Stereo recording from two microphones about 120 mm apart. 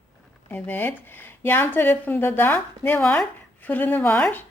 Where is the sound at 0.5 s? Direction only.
15° left (ahead or behind).